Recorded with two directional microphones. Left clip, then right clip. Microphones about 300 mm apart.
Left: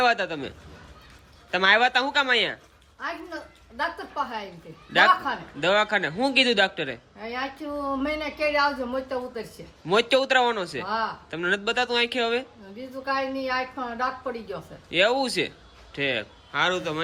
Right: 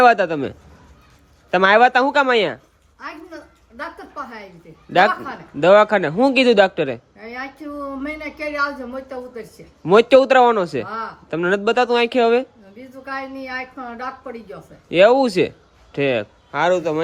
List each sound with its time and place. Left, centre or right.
0.0 s a man's voice: centre
3.8 s a woman's voice: centre
4.9 s a man's voice: centre
7.2 s a woman's voice: centre
9.8 s speech: centre
13.1 s a woman's voice: centre
14.8 s a man's voice: centre